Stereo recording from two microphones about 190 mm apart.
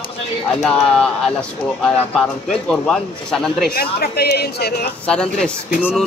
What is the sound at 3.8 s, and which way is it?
Speech, 55° left (ahead or behind).